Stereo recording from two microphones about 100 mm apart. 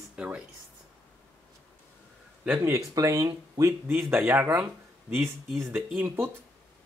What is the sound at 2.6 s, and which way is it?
Speech, 30° right (ahead or behind).